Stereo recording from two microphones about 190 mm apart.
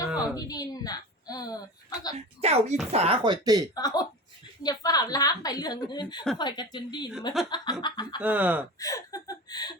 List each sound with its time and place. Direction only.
0.3 s a sound: 20° left (ahead or behind)
2.1 s a woman's voice: 35° right (ahead or behind)
3.8 s a woman's voice: 20° left (ahead or behind)
8.2 s speech: 10° right (ahead or behind)
8.8 s chuckle: 20° left (ahead or behind)